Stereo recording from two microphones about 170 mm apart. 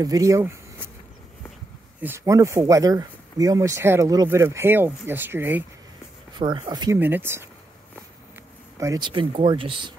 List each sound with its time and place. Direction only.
0.0 s speech: 20° right (ahead or behind)
2.0 s speech: 15° right (ahead or behind)
6.3 s speech: 25° right (ahead or behind)
7.0 s speech: 10° right (ahead or behind)
8.7 s speech: 20° right (ahead or behind)